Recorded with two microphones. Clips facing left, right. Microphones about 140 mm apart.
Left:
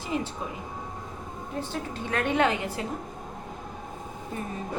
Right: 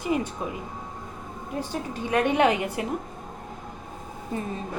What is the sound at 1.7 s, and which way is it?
A woman's voice, 15° right (ahead or behind).